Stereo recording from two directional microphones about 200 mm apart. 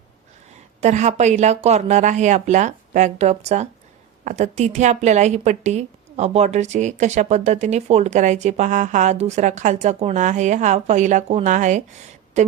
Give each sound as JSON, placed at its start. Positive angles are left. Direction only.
{"t": 0.8, "sound": "a woman's voice", "side_deg": -35}